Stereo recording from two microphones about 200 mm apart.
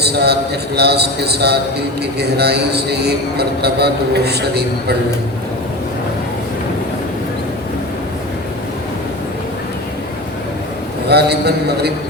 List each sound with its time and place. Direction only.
0.0 s a man's voice: 55° right (ahead or behind)
11.1 s a man's voice: 55° right (ahead or behind)